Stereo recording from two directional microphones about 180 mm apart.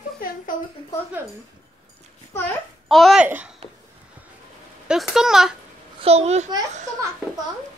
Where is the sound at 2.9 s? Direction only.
Centre (ahead or behind).